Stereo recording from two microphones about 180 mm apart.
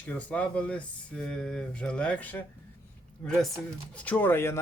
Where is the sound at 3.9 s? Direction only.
10° left (ahead or behind).